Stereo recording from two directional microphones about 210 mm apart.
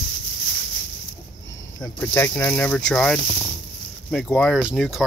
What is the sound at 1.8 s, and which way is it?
Speech, 10° left (ahead or behind).